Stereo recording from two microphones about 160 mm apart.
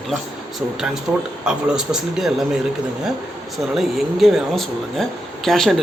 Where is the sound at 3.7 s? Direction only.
Centre (ahead or behind).